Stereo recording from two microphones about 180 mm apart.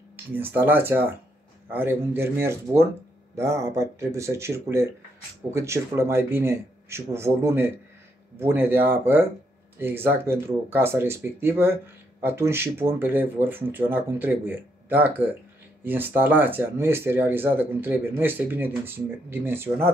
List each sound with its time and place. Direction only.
0.1 s speech: 10° right (ahead or behind)